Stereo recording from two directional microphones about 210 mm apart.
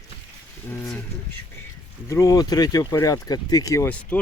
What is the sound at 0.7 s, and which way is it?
Speech, 10° left (ahead or behind).